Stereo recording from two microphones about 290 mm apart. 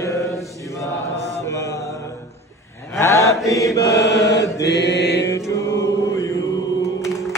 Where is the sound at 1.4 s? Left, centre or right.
Centre.